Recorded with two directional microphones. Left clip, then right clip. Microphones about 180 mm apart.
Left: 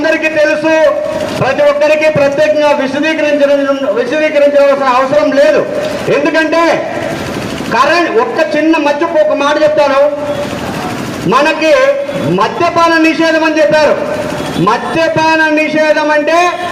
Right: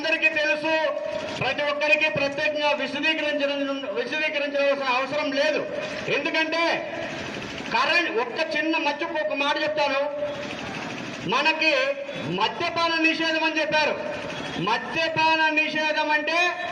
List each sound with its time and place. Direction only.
0.0 s a man's voice: 45° left (ahead or behind)
11.3 s a man's voice: 45° left (ahead or behind)